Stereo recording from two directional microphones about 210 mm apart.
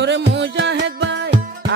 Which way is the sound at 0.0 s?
55° right (ahead or behind).